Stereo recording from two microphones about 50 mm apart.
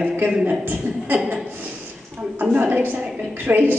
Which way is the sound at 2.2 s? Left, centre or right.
Centre.